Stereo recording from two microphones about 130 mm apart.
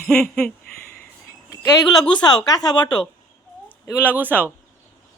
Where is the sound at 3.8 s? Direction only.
15° left (ahead or behind).